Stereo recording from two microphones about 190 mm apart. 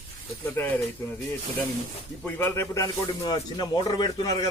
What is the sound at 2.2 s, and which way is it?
Speech, 15° left (ahead or behind).